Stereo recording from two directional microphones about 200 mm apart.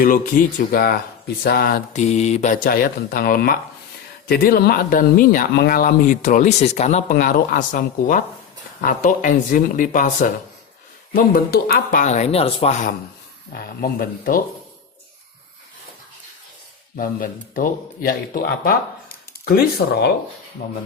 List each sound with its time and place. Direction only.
0.0 s speech: 45° left (ahead or behind)
13.5 s speech: 45° left (ahead or behind)
17.0 s speech: 45° left (ahead or behind)